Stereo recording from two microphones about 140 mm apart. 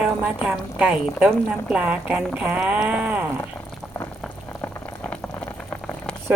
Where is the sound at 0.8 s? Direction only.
10° right (ahead or behind).